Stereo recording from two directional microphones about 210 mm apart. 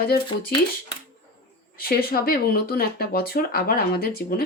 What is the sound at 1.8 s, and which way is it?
Speech, 45° left (ahead or behind).